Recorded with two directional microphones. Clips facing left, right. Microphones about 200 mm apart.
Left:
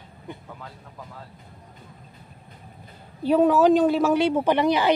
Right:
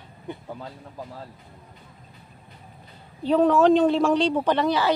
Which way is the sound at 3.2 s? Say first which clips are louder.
Even; 5° left (ahead or behind).